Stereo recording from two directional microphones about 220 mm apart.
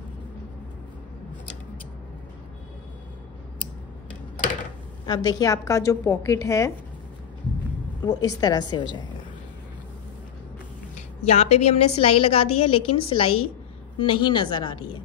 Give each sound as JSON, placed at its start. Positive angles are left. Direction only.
{"t": 5.0, "sound": "a woman's voice", "side_deg": 15}
{"t": 8.0, "sound": "a woman's voice", "side_deg": 15}
{"t": 11.2, "sound": "a woman's voice", "side_deg": 30}